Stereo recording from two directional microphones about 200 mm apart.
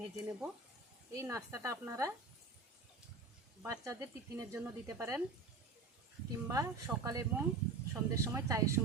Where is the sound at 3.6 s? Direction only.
15° right (ahead or behind).